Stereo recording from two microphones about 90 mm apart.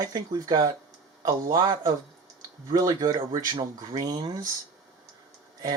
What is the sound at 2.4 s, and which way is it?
Speech, 40° right (ahead or behind).